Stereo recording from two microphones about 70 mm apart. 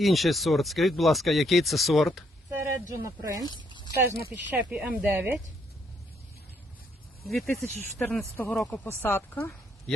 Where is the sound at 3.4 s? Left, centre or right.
Left.